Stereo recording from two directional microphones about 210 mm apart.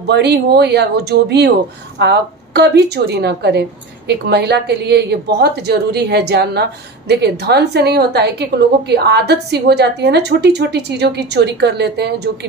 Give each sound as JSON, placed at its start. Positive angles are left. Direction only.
{"t": 0.1, "sound": "speech", "side_deg": -50}